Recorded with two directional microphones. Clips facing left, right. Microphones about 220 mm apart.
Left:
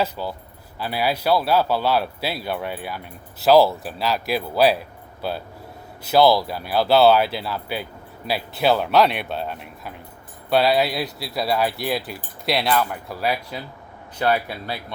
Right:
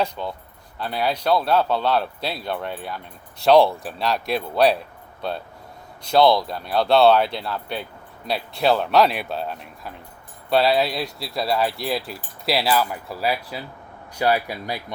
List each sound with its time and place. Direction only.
0.0 s speech: 5° left (ahead or behind); by 14.9 s 15° right (ahead or behind)